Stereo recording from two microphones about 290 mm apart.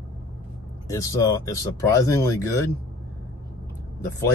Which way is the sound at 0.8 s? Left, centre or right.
Centre.